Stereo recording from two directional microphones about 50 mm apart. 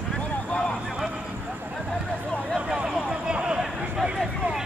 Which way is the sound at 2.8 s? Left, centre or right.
Right.